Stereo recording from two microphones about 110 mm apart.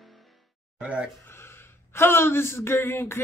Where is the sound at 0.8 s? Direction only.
10° right (ahead or behind).